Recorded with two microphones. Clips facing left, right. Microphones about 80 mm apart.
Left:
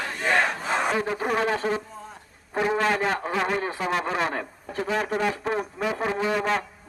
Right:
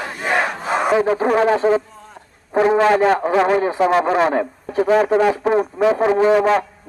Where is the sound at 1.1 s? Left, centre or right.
Right.